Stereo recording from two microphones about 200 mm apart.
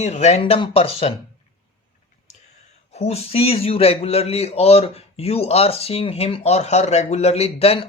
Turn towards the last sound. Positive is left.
turn(degrees=30)  # may be behind; listen again after turning